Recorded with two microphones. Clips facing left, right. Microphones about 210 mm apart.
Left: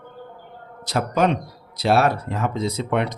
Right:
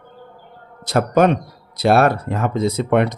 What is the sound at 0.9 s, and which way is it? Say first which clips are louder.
Speech: right 5 dB; 55° right (ahead or behind).